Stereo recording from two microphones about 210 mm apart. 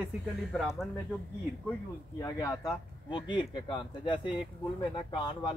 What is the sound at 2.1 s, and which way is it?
Speech, 15° left (ahead or behind).